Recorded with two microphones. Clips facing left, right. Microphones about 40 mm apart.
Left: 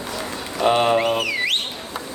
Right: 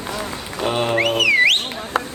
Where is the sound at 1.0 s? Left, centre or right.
Right.